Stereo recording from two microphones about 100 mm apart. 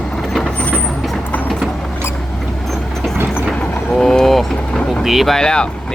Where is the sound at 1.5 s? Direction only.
Centre (ahead or behind).